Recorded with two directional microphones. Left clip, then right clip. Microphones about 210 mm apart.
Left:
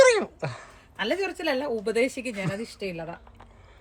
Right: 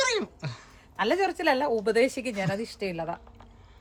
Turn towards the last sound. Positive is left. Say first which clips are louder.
# right 2 dB
turn(degrees=-10)  # may be behind; listen again after turning